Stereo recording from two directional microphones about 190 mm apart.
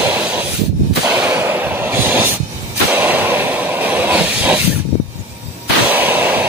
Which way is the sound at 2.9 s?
10° right (ahead or behind).